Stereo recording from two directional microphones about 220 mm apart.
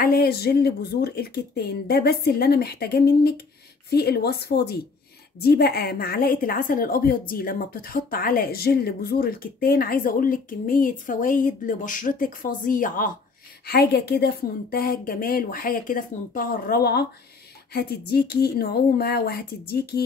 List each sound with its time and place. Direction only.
0.0 s a woman's voice: 45° left (ahead or behind)